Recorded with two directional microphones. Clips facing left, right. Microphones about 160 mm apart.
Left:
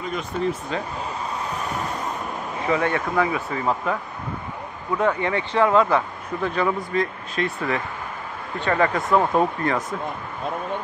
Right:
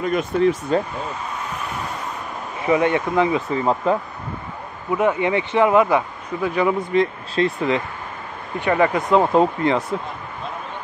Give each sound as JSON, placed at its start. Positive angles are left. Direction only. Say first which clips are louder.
{"t": 0.0, "sound": "speech", "louder": "right 7 dB", "side_deg": -60}
{"t": 2.6, "sound": "speech", "louder": "right 5 dB", "side_deg": -20}
{"t": 4.9, "sound": "speech", "louder": "right 3 dB", "side_deg": -15}